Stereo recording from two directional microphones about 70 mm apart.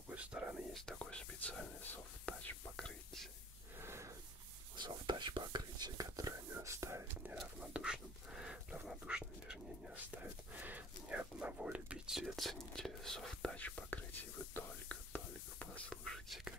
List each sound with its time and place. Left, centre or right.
0.1 s whispering: centre
0.9 s whispering: centre
2.7 s whispering: centre
3.7 s snort: right
4.7 s whispering: right
6.5 s speech: right
7.6 s whispering: centre
12.1 s speech: centre
13.6 s whispering: left
15.9 s whispering: centre